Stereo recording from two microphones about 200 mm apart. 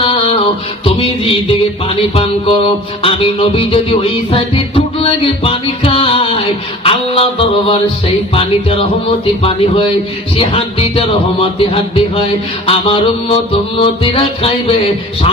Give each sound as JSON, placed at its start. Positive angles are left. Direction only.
{"t": 0.1, "sound": "music", "side_deg": 30}
{"t": 3.0, "sound": "music", "side_deg": 30}